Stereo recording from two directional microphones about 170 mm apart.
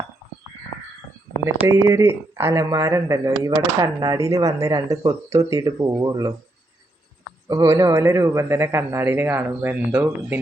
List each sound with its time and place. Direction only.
1.5 s speech: 15° right (ahead or behind)
7.4 s a man's voice: 20° right (ahead or behind)